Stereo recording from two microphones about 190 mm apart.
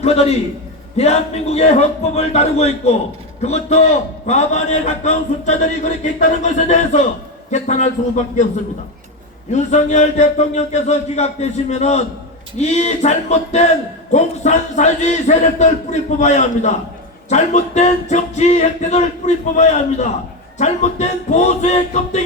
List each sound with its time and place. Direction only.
0.0 s a man's voice: 35° left (ahead or behind)
9.5 s a man's voice: 40° left (ahead or behind)